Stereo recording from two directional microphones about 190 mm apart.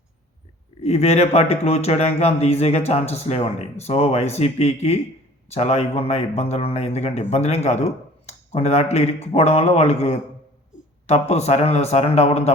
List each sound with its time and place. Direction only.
0.8 s speech: 35° left (ahead or behind)